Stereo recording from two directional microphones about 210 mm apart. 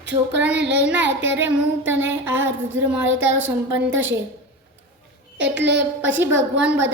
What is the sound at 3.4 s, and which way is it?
Music, 10° right (ahead or behind).